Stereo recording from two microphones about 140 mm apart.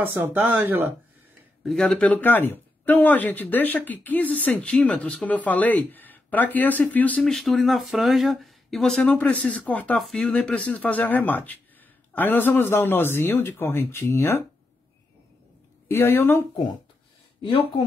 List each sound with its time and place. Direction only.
0.0 s speech: 15° right (ahead or behind)
1.6 s speech: 5° left (ahead or behind); by 14.4 s 20° left (ahead or behind)
15.9 s speech: 20° left (ahead or behind)
17.4 s speech: 40° left (ahead or behind)